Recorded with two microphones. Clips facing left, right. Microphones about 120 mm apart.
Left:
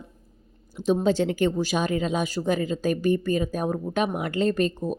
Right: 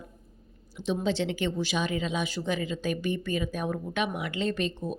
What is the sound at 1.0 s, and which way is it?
A woman's voice, 45° left (ahead or behind).